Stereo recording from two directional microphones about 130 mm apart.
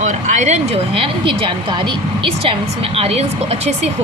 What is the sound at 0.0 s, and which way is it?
Speech, 70° right (ahead or behind).